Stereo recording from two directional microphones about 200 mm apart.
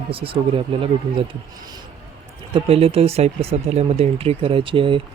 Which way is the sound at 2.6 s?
30° right (ahead or behind).